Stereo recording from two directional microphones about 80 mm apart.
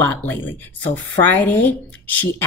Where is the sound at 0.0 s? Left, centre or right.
Left.